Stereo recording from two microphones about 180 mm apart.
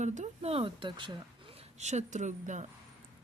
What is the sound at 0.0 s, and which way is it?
Speech, 40° right (ahead or behind).